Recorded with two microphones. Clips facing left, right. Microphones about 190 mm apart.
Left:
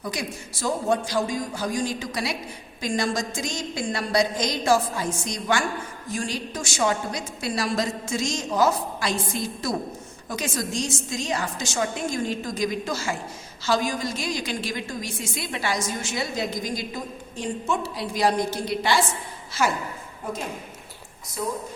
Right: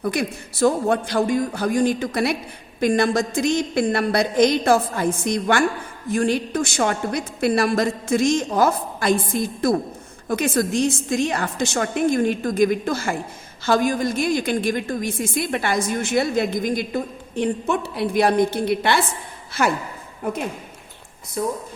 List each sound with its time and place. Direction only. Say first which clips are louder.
0.0 s a woman's voice: right 7 dB; 60° right (ahead or behind)